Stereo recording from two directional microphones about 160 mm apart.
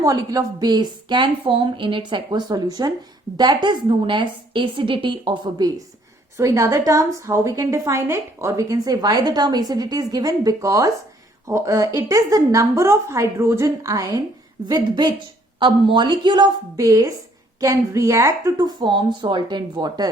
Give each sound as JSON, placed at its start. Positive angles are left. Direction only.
{"t": 0.0, "sound": "a woman's voice", "side_deg": -20}